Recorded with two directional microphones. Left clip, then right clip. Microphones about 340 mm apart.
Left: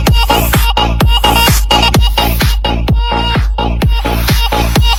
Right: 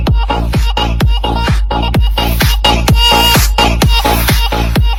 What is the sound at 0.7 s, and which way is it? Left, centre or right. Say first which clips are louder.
Music: even; centre.